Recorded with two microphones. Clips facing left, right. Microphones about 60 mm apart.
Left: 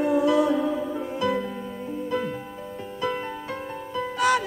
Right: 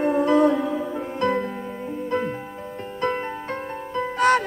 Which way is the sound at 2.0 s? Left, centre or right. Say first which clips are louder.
Right 3 dB; right.